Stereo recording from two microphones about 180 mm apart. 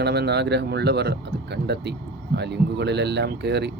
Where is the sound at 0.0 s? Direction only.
65° right (ahead or behind).